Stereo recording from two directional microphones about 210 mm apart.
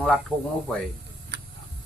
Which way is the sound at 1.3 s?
50° right (ahead or behind).